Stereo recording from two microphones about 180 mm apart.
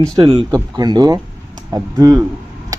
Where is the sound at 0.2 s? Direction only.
25° right (ahead or behind).